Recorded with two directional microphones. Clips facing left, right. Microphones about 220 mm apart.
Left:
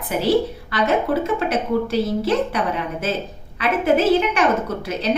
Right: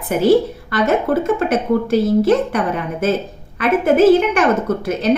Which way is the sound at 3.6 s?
50° right (ahead or behind).